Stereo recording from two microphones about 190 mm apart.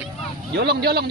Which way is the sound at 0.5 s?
55° right (ahead or behind).